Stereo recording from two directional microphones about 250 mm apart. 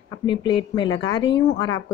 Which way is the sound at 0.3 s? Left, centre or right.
Centre.